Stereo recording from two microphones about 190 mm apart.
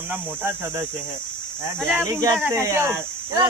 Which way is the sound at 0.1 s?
10° right (ahead or behind).